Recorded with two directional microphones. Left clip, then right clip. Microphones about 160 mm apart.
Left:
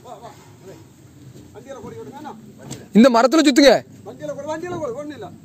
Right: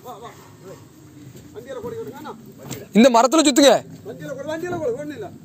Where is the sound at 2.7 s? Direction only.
40° left (ahead or behind).